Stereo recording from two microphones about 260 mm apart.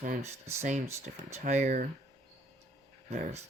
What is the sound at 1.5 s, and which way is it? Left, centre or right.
Speech, right.